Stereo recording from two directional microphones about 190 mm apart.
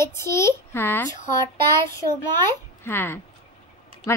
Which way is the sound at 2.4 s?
10° left (ahead or behind).